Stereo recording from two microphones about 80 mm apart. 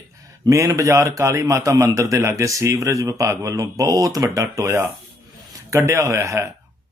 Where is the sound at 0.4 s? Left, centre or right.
Right.